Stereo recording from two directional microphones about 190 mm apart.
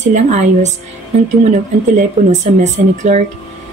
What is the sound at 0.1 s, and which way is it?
Speech, 40° right (ahead or behind).